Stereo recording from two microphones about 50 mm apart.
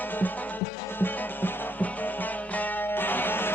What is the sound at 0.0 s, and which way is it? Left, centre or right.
Music, left.